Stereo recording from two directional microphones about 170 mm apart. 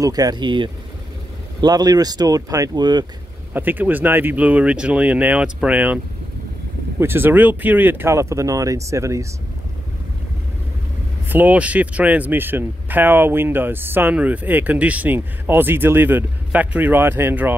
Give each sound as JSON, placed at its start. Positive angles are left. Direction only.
{"t": 0.0, "sound": "speech", "side_deg": -20}
{"t": 3.5, "sound": "speech", "side_deg": -10}
{"t": 7.0, "sound": "speech", "side_deg": -15}
{"t": 11.2, "sound": "speech", "side_deg": -10}